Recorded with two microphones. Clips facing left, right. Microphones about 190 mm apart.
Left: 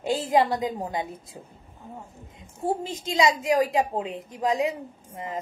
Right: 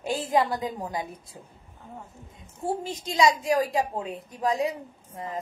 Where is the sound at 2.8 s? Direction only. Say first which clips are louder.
Right 2 dB; 20° left (ahead or behind).